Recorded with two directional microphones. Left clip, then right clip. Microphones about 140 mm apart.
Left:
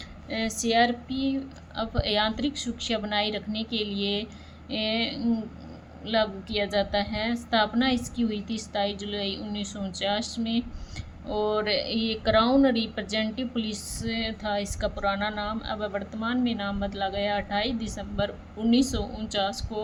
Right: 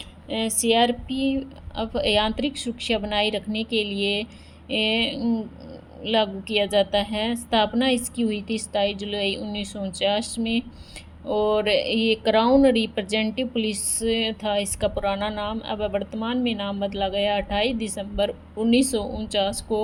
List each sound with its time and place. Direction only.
0.3 s speech: 45° right (ahead or behind)